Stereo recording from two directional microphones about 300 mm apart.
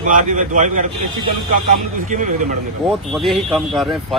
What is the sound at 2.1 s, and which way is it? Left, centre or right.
Speech, right.